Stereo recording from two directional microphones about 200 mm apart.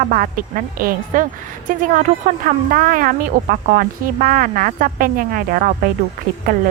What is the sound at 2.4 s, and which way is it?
Speech, 45° right (ahead or behind).